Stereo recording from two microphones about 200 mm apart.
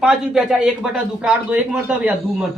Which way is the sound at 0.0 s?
5° right (ahead or behind).